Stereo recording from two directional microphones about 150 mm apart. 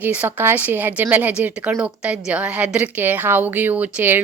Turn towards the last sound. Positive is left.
turn(degrees=-10)  # may be behind; listen again after turning